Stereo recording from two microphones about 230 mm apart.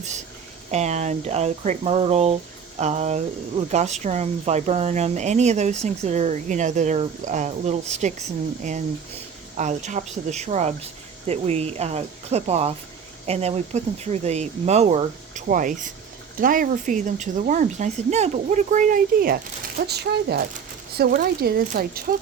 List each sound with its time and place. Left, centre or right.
0.7 s speech: right